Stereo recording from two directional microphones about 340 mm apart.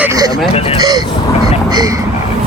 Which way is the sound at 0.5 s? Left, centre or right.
Centre.